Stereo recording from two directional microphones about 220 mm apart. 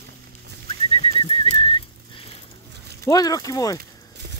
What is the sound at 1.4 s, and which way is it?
Whistling, 25° left (ahead or behind).